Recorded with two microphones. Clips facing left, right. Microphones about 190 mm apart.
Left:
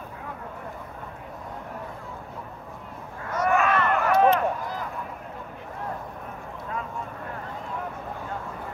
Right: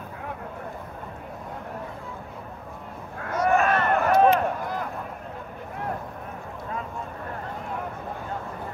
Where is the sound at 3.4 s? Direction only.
40° right (ahead or behind).